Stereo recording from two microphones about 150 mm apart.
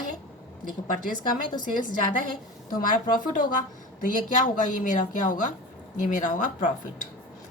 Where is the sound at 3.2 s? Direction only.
60° left (ahead or behind).